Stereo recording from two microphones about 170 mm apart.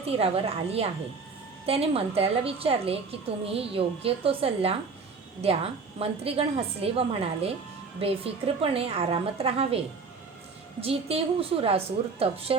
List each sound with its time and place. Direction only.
0.0 s a woman's voice: 35° right (ahead or behind)
10.8 s a woman's voice: 35° right (ahead or behind)